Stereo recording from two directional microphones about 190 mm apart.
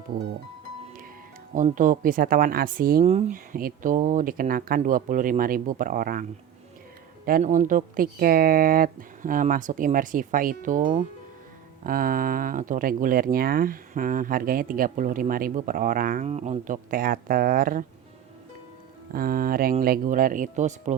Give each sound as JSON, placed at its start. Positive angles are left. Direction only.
{"t": 1.5, "sound": "speech", "side_deg": -45}
{"t": 3.0, "sound": "speech", "side_deg": -35}
{"t": 7.3, "sound": "speech", "side_deg": -45}
{"t": 19.1, "sound": "speech", "side_deg": -50}